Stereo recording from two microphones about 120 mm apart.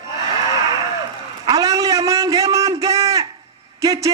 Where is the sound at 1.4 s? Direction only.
30° right (ahead or behind).